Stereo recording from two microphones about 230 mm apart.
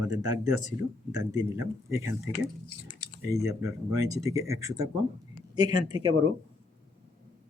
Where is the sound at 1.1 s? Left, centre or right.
Centre.